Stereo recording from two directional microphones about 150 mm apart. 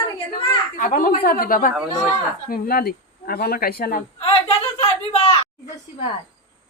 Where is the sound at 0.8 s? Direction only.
65° left (ahead or behind).